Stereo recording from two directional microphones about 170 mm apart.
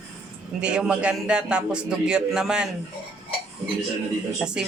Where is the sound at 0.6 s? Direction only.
5° right (ahead or behind).